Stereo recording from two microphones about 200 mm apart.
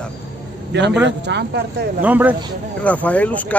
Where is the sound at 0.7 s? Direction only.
60° right (ahead or behind).